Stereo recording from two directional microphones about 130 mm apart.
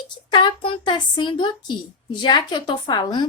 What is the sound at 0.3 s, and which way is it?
A woman's voice, 35° left (ahead or behind).